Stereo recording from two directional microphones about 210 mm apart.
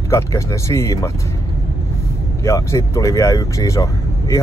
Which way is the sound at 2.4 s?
15° left (ahead or behind).